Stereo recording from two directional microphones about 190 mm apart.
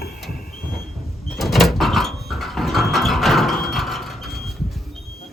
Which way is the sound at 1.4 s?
Centre (ahead or behind).